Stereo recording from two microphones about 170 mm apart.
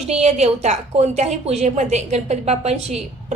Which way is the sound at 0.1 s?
40° right (ahead or behind).